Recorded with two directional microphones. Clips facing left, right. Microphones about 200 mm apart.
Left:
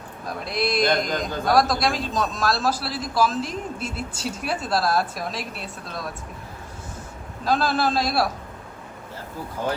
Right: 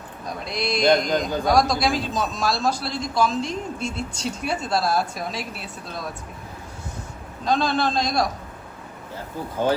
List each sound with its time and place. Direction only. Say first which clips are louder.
0.3 s a man's voice: left 1 dB; centre (ahead or behind)
7.4 s a man's voice: even; 5° left (ahead or behind)